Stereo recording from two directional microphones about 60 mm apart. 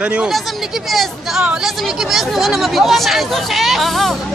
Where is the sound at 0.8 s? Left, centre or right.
Centre.